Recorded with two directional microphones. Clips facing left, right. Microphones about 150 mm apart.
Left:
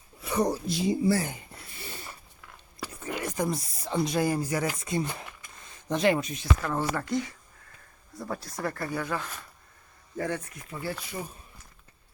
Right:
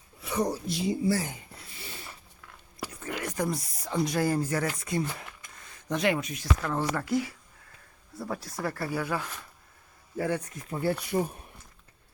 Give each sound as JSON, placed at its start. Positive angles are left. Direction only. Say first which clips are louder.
{"t": 0.3, "sound": "speech", "louder": "left 2 dB", "side_deg": 65}
{"t": 1.1, "sound": "a sound", "louder": "left 2 dB", "side_deg": 55}
{"t": 3.0, "sound": "speech", "louder": "left 1 dB", "side_deg": 20}
{"t": 6.6, "sound": "speech", "louder": "right 2 dB", "side_deg": 0}
{"t": 10.7, "sound": "speech", "louder": "right 7 dB", "side_deg": -50}